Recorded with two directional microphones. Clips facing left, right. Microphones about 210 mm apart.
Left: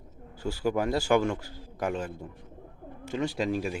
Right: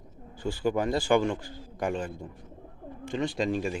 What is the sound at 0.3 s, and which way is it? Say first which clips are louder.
A man's voice: even; 5° left (ahead or behind).